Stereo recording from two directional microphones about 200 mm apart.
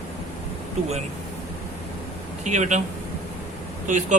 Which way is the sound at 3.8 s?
40° right (ahead or behind).